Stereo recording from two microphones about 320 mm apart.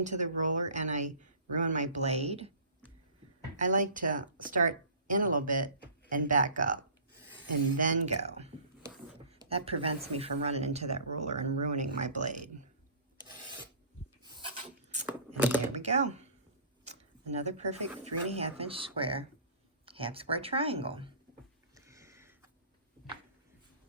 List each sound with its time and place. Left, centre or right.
0.0 s a woman's voice: right
3.6 s a woman's voice: right
7.8 s a woman's voice: right
14.3 s filing: centre
15.4 s typing: centre
15.7 s speech: right
16.8 s a sound: right
18.0 s speech: centre
21.8 s a sound: centre